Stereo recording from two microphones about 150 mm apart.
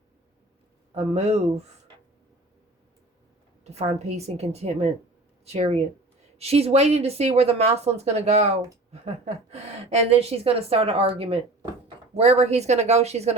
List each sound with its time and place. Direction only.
0.9 s a woman's voice: 45° right (ahead or behind)
3.6 s a woman's voice: 45° right (ahead or behind)